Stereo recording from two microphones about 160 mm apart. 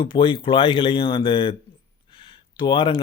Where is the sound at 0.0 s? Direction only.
30° left (ahead or behind).